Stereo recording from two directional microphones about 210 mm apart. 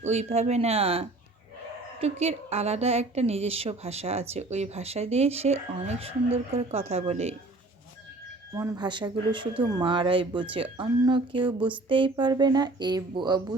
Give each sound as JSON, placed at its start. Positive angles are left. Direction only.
{"t": 0.0, "sound": "a woman's voice", "side_deg": -30}
{"t": 8.5, "sound": "a woman's voice", "side_deg": -15}